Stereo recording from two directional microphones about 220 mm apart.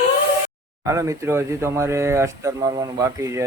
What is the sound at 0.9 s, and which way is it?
Speech, 15° right (ahead or behind).